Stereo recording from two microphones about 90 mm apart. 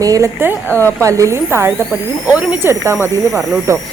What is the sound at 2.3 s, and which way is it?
Speech, 15° right (ahead or behind).